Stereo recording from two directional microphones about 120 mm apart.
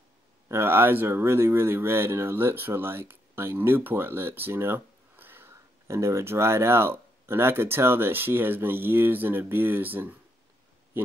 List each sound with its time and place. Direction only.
0.5 s speech: 20° right (ahead or behind)